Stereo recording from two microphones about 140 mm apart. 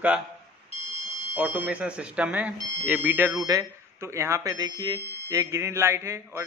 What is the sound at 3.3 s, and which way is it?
Speech, 25° right (ahead or behind).